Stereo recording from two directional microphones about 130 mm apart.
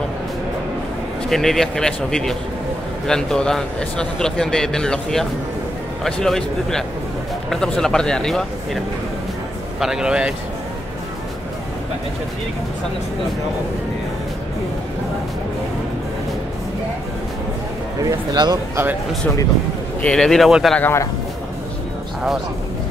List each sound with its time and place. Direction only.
1.3 s a man's voice: centre (ahead or behind)
9.8 s a man's voice: 5° right (ahead or behind)
18.3 s speech: 35° right (ahead or behind)
20.0 s a man's voice: 5° left (ahead or behind)
20.7 s a man's voice: 15° left (ahead or behind)